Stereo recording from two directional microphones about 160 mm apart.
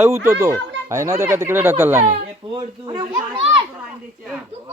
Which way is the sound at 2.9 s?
30° right (ahead or behind).